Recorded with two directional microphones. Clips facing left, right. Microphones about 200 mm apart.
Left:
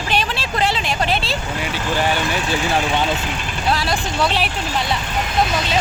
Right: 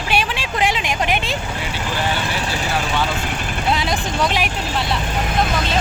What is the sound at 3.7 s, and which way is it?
Speech, 20° right (ahead or behind).